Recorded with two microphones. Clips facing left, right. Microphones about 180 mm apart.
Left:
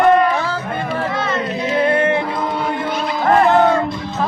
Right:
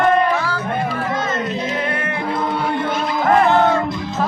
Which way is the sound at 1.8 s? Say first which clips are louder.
Left 8 dB; 30° left (ahead or behind).